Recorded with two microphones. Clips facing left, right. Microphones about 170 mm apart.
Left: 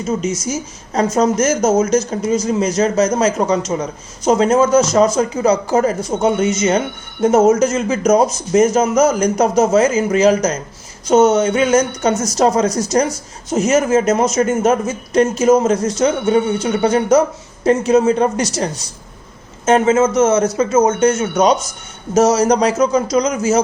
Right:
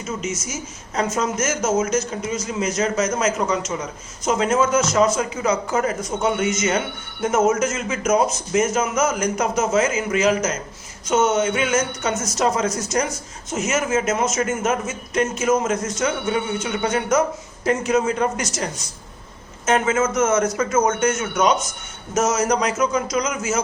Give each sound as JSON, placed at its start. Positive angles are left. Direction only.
{"t": 0.0, "sound": "speech", "side_deg": 35}